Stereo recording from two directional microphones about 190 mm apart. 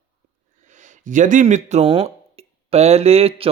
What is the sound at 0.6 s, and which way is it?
Speech, 40° right (ahead or behind).